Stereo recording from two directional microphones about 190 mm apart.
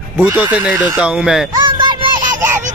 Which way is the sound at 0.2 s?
10° right (ahead or behind).